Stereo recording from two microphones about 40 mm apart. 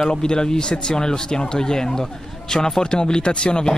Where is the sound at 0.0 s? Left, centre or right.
Centre.